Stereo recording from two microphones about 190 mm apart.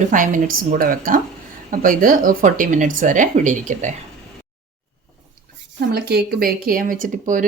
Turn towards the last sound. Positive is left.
turn(degrees=-45)  # may be behind; listen again after turning